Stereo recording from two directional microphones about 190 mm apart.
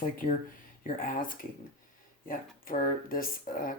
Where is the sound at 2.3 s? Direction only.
45° left (ahead or behind).